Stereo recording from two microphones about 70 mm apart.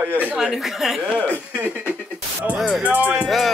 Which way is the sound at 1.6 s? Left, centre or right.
Right.